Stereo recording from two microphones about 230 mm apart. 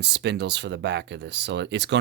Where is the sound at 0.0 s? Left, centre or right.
Right.